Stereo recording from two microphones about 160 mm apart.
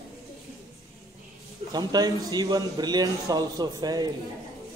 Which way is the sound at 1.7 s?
25° right (ahead or behind).